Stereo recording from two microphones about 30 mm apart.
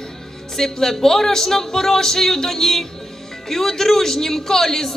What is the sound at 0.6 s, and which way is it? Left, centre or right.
A woman's voice, centre.